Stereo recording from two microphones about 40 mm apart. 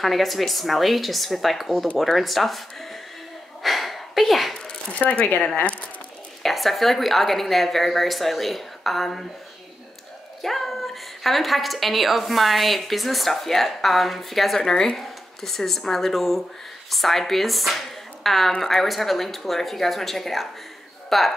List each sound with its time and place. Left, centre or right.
0.0 s a woman's voice: centre
3.6 s a sound: centre
4.9 s speech: left
6.4 s a woman's voice: centre
10.4 s a woman's voice: centre